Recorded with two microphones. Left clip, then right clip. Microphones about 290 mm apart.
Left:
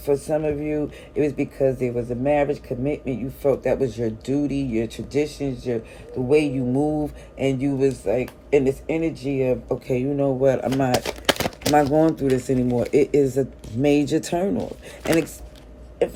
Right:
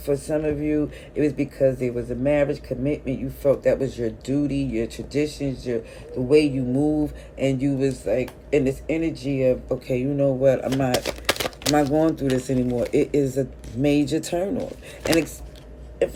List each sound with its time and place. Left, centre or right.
0.0 s speech: centre